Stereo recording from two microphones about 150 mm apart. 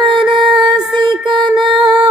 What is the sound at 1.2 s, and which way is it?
Music, 30° right (ahead or behind).